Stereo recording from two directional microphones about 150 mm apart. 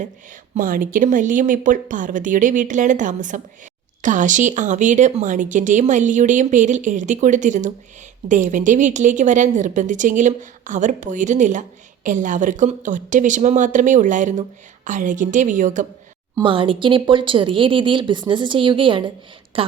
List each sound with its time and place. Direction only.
0.5 s speech: 65° right (ahead or behind)
16.4 s speech: 35° right (ahead or behind)